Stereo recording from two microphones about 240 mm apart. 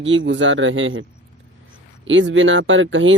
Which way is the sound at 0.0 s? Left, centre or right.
Right.